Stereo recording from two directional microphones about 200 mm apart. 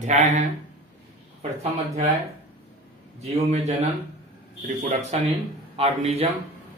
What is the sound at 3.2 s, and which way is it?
A man's voice, 35° right (ahead or behind).